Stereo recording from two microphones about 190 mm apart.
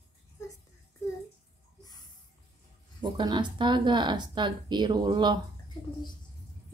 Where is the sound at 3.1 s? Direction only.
25° right (ahead or behind).